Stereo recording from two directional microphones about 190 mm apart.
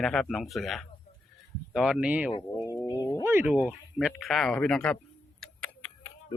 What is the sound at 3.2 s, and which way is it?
A man's voice, 10° right (ahead or behind).